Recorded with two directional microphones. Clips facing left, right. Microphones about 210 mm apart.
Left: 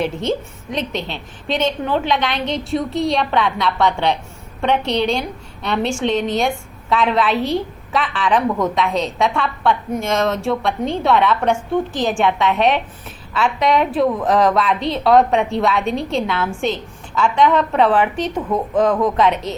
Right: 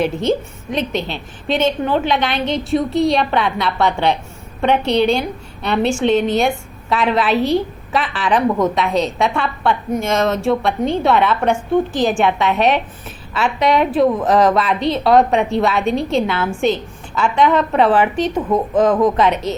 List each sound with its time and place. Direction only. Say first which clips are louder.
0.0 s a woman's voice: right 3 dB; 5° right (ahead or behind)
8.4 s a woman's voice: right 3 dB; 20° right (ahead or behind)
8.7 s a woman's voice: right 2 dB; 5° right (ahead or behind)